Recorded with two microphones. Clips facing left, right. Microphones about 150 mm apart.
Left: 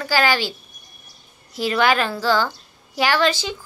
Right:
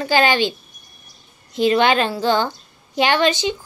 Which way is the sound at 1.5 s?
20° right (ahead or behind).